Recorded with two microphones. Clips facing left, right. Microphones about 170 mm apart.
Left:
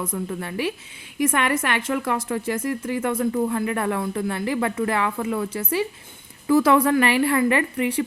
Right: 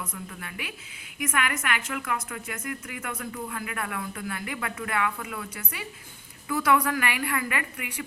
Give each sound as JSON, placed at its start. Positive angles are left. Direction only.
{"t": 0.0, "sound": "a woman's voice", "side_deg": 30}